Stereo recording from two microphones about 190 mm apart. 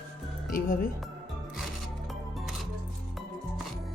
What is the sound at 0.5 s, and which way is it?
Speech, 50° left (ahead or behind).